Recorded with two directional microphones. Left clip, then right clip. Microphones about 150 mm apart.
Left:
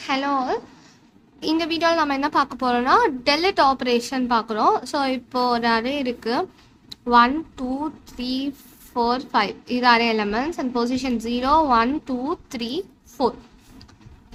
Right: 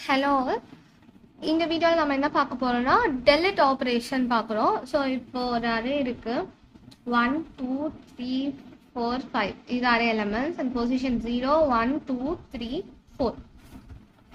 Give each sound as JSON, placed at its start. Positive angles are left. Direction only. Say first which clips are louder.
{"t": 0.0, "sound": "a woman's voice", "louder": "left 1 dB", "side_deg": 10}
{"t": 1.4, "sound": "a woman's voice", "louder": "left 2 dB", "side_deg": 25}